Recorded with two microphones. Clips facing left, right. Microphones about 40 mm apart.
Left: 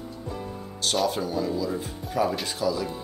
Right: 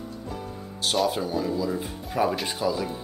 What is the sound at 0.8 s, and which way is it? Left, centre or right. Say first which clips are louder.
Speech: right 1 dB; centre.